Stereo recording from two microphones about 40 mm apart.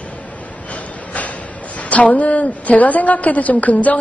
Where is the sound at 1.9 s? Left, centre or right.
Left.